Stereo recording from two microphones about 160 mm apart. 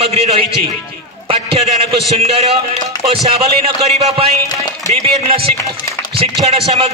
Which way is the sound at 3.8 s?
40° right (ahead or behind).